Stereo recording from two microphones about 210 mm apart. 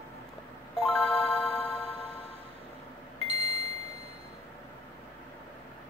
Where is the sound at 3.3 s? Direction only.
30° right (ahead or behind).